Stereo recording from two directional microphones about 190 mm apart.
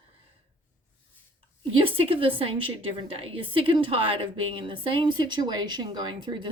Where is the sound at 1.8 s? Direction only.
25° right (ahead or behind).